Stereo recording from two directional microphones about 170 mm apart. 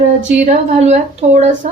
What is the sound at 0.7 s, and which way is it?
A woman's voice, 40° right (ahead or behind).